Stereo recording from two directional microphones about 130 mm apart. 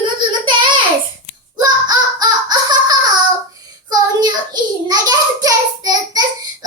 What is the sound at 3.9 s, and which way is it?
Child singing, 30° right (ahead or behind).